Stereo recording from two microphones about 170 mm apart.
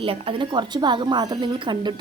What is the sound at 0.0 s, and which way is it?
A woman's voice, 30° right (ahead or behind).